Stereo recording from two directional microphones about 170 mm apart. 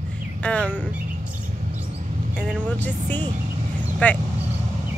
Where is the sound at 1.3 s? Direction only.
50° right (ahead or behind).